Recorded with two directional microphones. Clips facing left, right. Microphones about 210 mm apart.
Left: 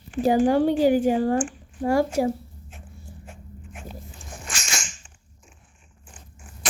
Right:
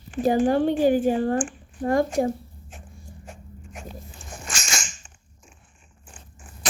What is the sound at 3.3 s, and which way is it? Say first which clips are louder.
Dog: right 3 dB; 40° right (ahead or behind).